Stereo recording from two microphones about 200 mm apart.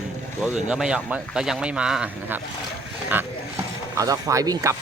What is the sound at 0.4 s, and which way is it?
Speech, centre (ahead or behind).